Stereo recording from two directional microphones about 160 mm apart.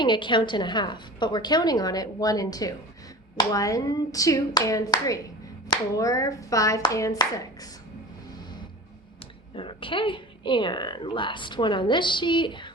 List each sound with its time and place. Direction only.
0.0 s a woman's voice: 30° left (ahead or behind)
9.6 s a woman's voice: 30° left (ahead or behind)